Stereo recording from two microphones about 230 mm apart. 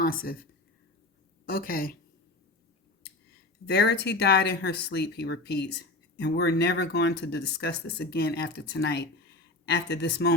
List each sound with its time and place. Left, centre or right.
0.0 s speech: left
1.5 s speech: left
3.7 s speech: left